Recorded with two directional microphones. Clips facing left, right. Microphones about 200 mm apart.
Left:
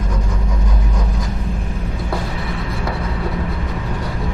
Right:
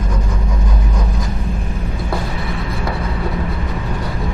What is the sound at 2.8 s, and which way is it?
Vehicle, 20° right (ahead or behind).